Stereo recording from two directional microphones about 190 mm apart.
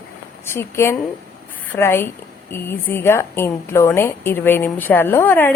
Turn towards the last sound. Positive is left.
turn(degrees=10)  # may be behind; listen again after turning